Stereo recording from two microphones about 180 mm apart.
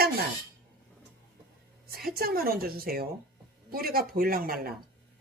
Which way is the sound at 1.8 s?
60° right (ahead or behind).